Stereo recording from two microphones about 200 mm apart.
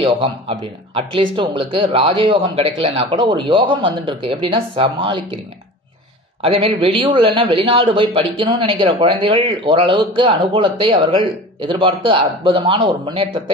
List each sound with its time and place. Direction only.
0.0 s a man's voice: 30° right (ahead or behind)
6.4 s a man's voice: 30° right (ahead or behind)